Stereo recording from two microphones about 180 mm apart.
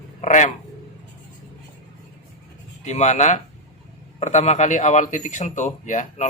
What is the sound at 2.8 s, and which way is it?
Speech, 40° left (ahead or behind).